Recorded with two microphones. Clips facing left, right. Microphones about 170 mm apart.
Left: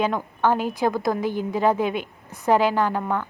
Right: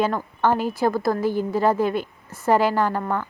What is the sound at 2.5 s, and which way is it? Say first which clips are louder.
Speech: even; 5° right (ahead or behind).